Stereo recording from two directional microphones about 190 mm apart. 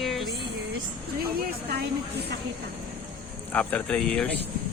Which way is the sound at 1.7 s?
60° right (ahead or behind).